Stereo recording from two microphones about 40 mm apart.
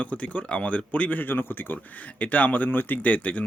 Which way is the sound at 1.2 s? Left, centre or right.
Left.